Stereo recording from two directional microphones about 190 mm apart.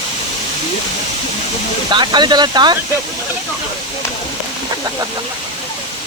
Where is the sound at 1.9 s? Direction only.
25° right (ahead or behind).